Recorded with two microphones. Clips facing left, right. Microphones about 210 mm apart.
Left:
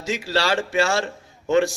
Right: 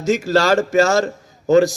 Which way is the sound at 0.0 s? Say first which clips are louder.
Right 7 dB; 45° right (ahead or behind).